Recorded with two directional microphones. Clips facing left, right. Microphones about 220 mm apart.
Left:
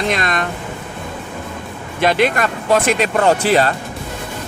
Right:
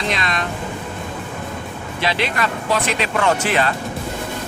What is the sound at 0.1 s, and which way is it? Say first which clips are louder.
Speech: left 4 dB; 50° left (ahead or behind).